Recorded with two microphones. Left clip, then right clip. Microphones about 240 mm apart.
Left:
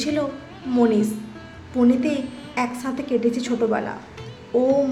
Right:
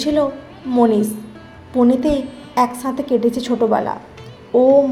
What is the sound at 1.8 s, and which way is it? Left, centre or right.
Speech, centre.